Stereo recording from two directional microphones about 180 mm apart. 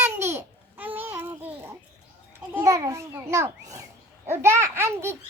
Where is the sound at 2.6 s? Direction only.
15° right (ahead or behind).